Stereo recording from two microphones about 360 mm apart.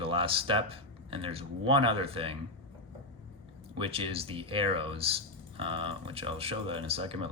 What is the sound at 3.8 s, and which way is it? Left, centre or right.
Speech, centre.